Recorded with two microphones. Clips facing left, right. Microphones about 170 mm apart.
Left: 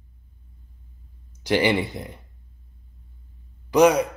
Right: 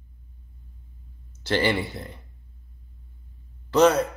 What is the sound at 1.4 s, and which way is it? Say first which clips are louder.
Speech: left 3 dB; 15° left (ahead or behind).